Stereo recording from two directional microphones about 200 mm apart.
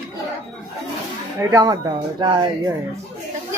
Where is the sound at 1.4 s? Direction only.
15° right (ahead or behind).